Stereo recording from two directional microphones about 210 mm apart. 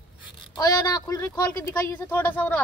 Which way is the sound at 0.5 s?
15° left (ahead or behind).